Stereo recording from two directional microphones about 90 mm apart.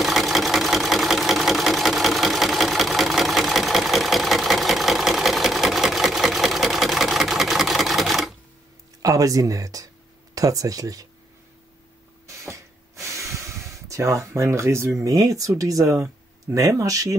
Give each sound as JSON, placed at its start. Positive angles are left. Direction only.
{"t": 0.0, "sound": "sewing machine", "side_deg": 0}
{"t": 9.0, "sound": "speech", "side_deg": -40}
{"t": 12.3, "sound": "snort", "side_deg": -35}
{"t": 15.0, "sound": "speech", "side_deg": -40}